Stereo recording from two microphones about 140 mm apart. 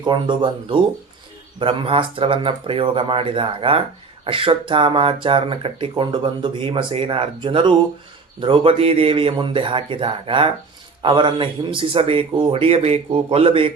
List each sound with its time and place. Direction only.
0.0 s speech: 35° right (ahead or behind)